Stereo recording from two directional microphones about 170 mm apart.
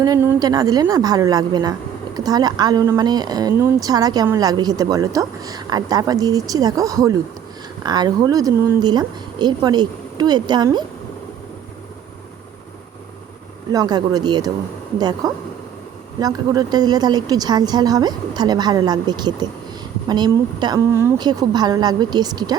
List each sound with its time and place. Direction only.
0.0 s a woman's voice: 20° right (ahead or behind)
13.7 s a woman's voice: 25° right (ahead or behind)